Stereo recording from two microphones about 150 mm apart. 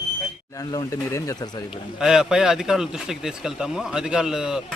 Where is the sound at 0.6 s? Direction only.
25° left (ahead or behind).